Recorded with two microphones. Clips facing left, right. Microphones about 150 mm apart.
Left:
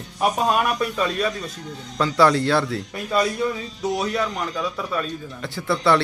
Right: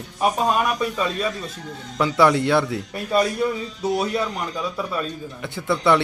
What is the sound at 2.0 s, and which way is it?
Speech, 15° right (ahead or behind).